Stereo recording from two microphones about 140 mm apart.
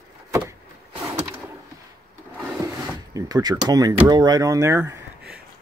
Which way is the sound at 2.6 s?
25° right (ahead or behind).